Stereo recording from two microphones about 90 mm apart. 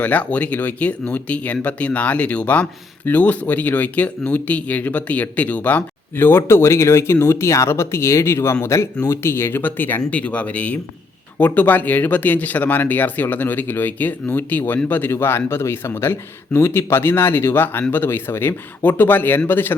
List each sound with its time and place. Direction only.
0.0 s speech: 15° left (ahead or behind)